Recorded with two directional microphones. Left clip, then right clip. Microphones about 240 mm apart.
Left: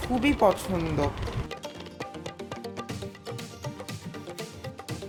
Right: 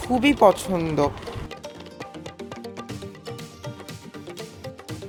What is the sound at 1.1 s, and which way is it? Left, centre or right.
Music, centre.